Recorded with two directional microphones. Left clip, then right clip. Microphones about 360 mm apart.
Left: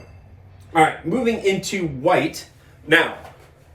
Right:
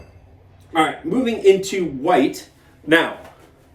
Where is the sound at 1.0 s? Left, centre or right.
Centre.